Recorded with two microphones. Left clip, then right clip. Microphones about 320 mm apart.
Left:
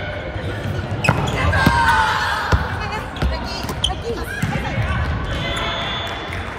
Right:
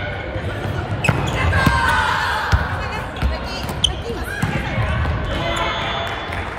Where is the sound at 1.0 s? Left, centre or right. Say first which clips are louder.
Left 1 dB; centre.